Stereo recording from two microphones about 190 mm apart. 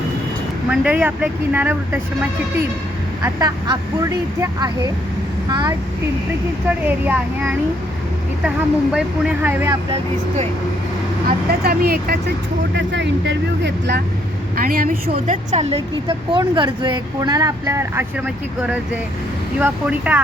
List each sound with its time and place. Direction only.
0.7 s speech: 10° right (ahead or behind)
3.2 s a woman's voice: 15° right (ahead or behind)
6.7 s speech: 10° right (ahead or behind)
11.6 s speech: 55° right (ahead or behind)
12.7 s speech: 65° right (ahead or behind)
14.5 s a woman's voice: 50° right (ahead or behind); by 18.0 s 15° right (ahead or behind)
19.5 s speech: 10° right (ahead or behind)